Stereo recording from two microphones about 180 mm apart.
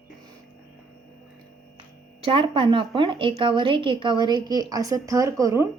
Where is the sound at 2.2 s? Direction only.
30° right (ahead or behind).